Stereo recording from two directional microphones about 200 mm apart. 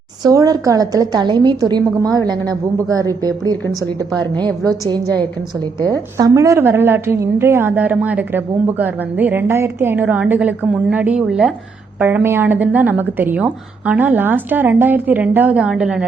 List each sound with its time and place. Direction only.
0.2 s a woman's voice: 20° right (ahead or behind)
4.6 s a woman's voice: 20° right (ahead or behind)